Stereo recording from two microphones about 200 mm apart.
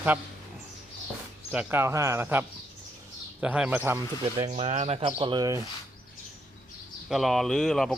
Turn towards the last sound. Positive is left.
turn(degrees=0)  # may be behind; listen again after turning